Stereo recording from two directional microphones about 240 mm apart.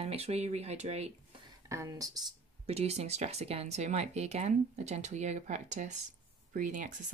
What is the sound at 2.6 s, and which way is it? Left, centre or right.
A woman's voice, right.